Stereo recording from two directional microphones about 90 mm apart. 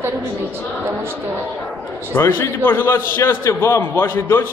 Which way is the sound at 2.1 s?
30° left (ahead or behind).